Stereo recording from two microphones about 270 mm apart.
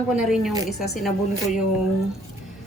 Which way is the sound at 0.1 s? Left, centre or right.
Centre.